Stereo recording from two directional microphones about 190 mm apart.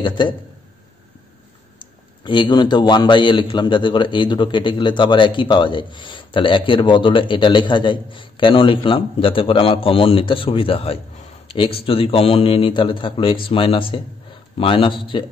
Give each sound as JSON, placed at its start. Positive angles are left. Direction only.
{"t": 0.0, "sound": "a man's voice", "side_deg": 25}
{"t": 1.8, "sound": "a man's voice", "side_deg": 25}